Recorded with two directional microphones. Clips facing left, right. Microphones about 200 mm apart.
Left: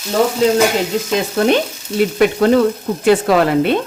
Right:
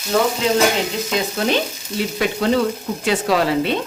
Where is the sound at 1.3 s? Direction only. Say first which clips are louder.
Left 6 dB; 55° left (ahead or behind).